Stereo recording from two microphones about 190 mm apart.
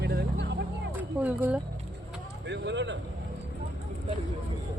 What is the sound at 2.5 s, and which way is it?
Speech, 70° right (ahead or behind).